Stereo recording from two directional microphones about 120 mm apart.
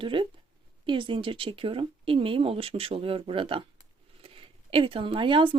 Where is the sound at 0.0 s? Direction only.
45° right (ahead or behind).